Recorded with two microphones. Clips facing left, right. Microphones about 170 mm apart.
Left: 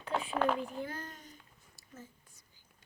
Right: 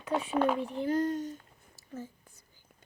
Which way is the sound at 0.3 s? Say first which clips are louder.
Right 4 dB; 10° right (ahead or behind).